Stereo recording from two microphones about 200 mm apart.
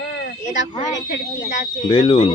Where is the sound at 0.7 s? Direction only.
25° left (ahead or behind).